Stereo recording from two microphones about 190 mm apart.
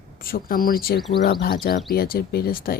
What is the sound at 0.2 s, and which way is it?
Speech, 50° left (ahead or behind).